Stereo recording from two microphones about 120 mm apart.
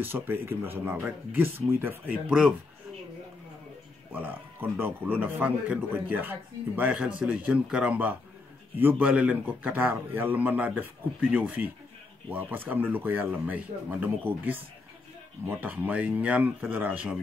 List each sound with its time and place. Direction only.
0.0 s speech: 20° right (ahead or behind)
4.1 s speech: 15° right (ahead or behind)
15.6 s speech: 15° right (ahead or behind)